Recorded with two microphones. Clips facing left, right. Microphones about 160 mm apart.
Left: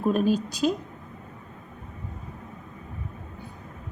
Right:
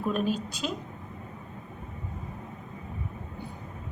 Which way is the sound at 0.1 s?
40° left (ahead or behind).